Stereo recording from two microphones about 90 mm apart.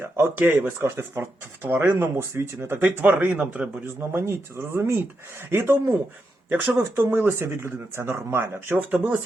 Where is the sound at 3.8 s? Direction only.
25° right (ahead or behind).